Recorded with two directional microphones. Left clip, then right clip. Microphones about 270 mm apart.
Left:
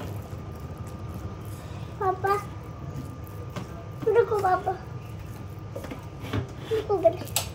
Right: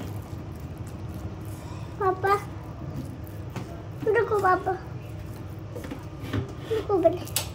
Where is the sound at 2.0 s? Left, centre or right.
Right.